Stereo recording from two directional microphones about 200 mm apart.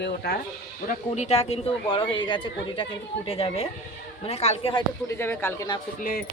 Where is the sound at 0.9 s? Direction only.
35° left (ahead or behind).